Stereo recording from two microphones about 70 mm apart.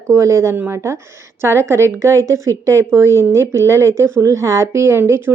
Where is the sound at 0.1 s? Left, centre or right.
Right.